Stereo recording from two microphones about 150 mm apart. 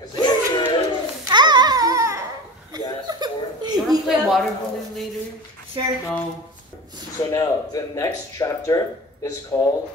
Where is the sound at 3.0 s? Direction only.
30° right (ahead or behind).